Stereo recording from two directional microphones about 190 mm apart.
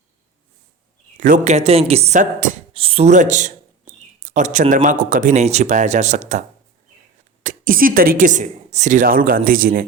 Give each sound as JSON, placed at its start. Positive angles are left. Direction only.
{"t": 1.2, "sound": "speech", "side_deg": -40}
{"t": 7.4, "sound": "a woman's voice", "side_deg": -45}